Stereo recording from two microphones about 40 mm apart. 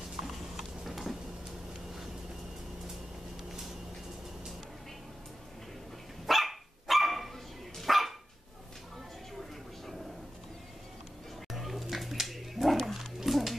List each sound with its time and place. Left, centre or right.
0.6 s a sound: centre
6.2 s dog: centre
11.5 s roaring cats: centre